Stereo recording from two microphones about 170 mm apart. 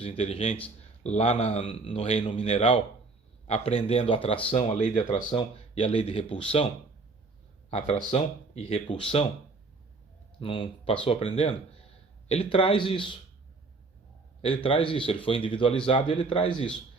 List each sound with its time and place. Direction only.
0.0 s speech: 35° left (ahead or behind)
4.5 s speech: 45° left (ahead or behind)
5.0 s speech: 30° left (ahead or behind)
7.7 s speech: 35° left (ahead or behind)
10.4 s speech: 30° left (ahead or behind)
14.4 s speech: 30° left (ahead or behind)